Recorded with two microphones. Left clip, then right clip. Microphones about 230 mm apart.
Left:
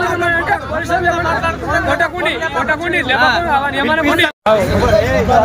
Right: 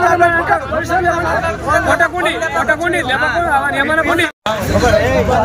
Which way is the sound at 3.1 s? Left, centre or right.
Left.